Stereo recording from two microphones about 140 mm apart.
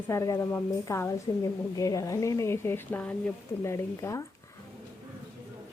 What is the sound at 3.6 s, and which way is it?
Speech, 20° left (ahead or behind).